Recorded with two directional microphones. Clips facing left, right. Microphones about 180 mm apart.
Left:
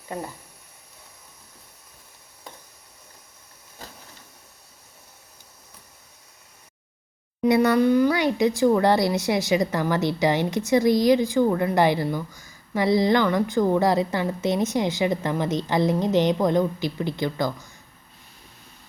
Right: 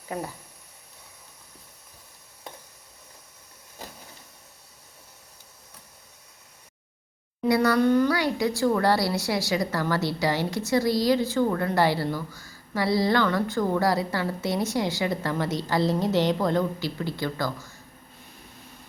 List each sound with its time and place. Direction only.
7.4 s speech: 20° left (ahead or behind)